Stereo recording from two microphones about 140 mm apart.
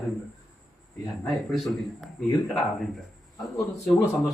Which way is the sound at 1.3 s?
Centre (ahead or behind).